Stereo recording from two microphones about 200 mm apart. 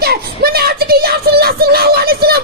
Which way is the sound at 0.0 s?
50° right (ahead or behind).